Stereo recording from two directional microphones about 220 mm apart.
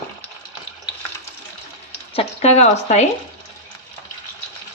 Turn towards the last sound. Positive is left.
turn(degrees=30)  # may be behind; listen again after turning